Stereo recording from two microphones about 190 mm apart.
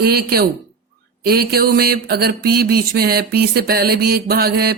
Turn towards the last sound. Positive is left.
turn(degrees=-55)  # may be behind; listen again after turning